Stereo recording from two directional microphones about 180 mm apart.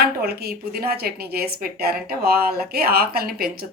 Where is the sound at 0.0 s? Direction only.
60° right (ahead or behind).